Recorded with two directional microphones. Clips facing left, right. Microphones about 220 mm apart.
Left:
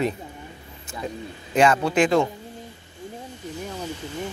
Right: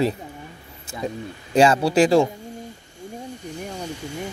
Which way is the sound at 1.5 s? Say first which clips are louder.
Right 3 dB; 35° right (ahead or behind).